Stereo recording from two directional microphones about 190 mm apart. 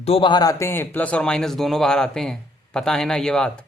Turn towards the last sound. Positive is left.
turn(degrees=5)  # may be behind; listen again after turning